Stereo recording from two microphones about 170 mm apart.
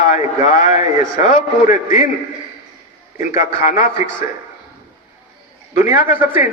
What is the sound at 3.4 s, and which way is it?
Speech, 50° left (ahead or behind).